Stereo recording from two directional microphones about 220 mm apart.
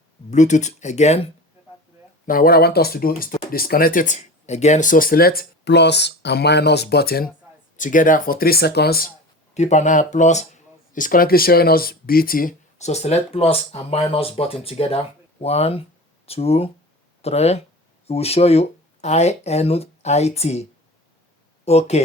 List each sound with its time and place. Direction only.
0.3 s speech: 35° left (ahead or behind)
2.2 s speech: 40° left (ahead or behind)
9.6 s speech: 30° left (ahead or behind)